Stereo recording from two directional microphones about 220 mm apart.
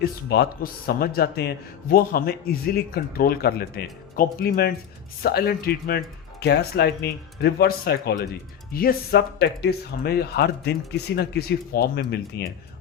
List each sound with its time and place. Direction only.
0.0 s speech: 45° left (ahead or behind)